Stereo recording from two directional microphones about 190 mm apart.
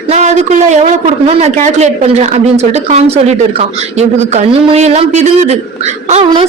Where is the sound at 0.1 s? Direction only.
35° right (ahead or behind).